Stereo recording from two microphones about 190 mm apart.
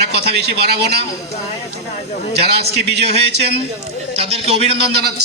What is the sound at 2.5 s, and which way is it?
Speech, 60° right (ahead or behind).